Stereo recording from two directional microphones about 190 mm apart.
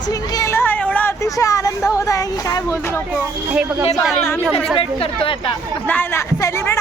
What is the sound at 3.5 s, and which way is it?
Speech, 10° right (ahead or behind).